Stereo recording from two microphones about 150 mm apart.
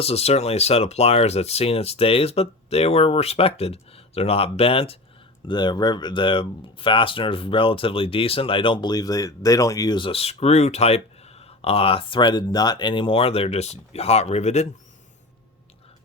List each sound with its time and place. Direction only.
0.0 s speech: 45° left (ahead or behind)